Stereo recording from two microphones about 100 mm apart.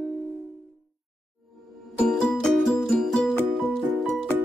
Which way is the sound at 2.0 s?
5° left (ahead or behind).